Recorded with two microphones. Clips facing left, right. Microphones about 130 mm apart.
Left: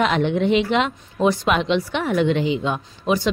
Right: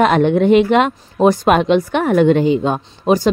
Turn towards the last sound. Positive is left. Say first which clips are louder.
# right 6 dB
turn(degrees=-40)  # may be behind; listen again after turning